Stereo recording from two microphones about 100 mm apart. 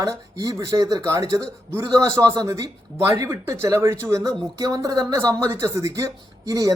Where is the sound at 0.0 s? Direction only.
35° right (ahead or behind).